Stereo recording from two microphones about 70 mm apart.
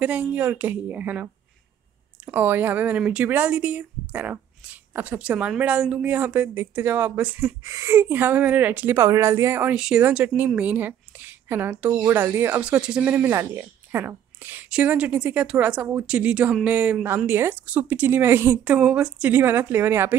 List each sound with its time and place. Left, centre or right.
0.0 s speech: right
7.6 s speech: right
9.8 s speech: centre
10.1 s speech: right
17.6 s speech: right
18.6 s speech: centre